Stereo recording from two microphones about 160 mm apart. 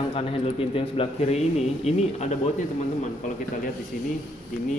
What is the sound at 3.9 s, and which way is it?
Speech, 55° left (ahead or behind).